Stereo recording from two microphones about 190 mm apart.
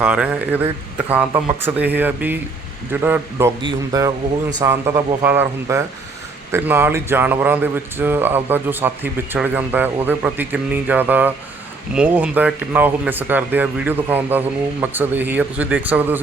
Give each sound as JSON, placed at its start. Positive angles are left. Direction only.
{"t": 0.0, "sound": "a man's voice", "side_deg": -10}